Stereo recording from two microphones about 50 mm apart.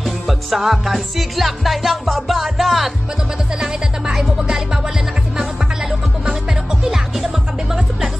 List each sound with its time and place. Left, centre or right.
0.0 s music: centre
3.5 s music: centre
6.8 s music: centre